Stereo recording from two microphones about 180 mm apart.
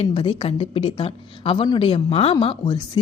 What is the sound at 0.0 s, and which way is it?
A woman's voice, 30° left (ahead or behind).